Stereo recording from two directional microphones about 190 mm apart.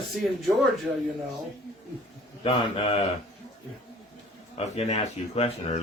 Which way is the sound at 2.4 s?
30° left (ahead or behind).